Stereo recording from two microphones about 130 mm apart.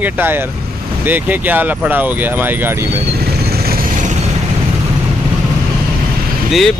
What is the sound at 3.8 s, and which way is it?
Vehicle, 75° right (ahead or behind).